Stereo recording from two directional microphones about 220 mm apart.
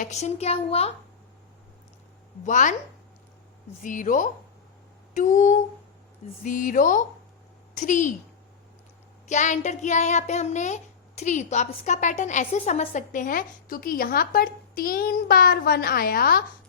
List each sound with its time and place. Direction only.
0.0 s a child's voice: 30° left (ahead or behind)
2.4 s a woman's voice: 35° left (ahead or behind)
3.8 s a woman's voice: 35° left (ahead or behind)
9.3 s a woman's voice: 35° left (ahead or behind)